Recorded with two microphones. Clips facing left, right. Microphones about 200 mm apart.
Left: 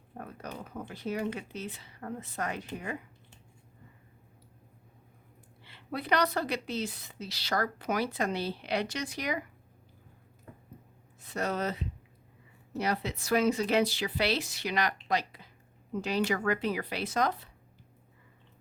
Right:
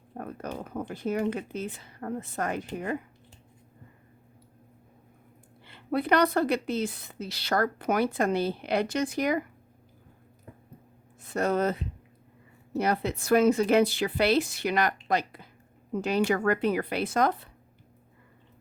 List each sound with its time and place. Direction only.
0.1 s a woman's voice: 50° right (ahead or behind)
5.6 s a woman's voice: 50° right (ahead or behind)
11.2 s a woman's voice: 50° right (ahead or behind)